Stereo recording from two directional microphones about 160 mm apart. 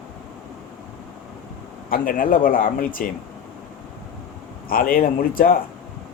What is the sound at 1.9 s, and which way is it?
A man's voice, 60° left (ahead or behind).